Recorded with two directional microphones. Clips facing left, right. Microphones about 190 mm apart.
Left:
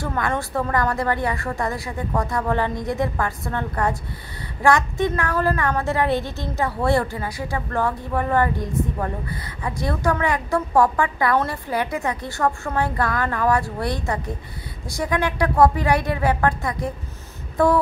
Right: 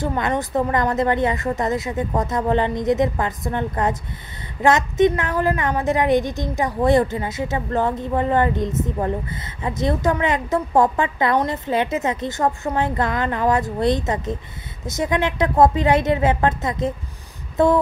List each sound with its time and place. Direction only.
0.0 s a woman's voice: 20° right (ahead or behind)